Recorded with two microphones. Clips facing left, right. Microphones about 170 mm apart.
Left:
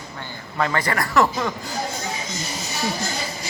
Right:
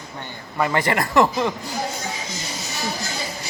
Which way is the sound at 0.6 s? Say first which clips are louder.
Right 2 dB; 20° right (ahead or behind).